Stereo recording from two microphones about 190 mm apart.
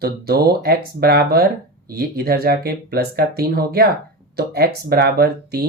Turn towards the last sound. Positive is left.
turn(degrees=-55)  # may be behind; listen again after turning